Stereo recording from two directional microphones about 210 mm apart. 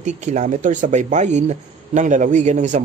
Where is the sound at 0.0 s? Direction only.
35° right (ahead or behind).